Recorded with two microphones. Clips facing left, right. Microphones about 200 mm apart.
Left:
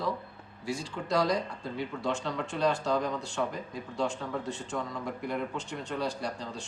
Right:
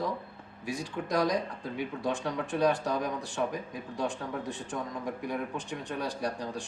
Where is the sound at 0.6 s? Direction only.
15° right (ahead or behind).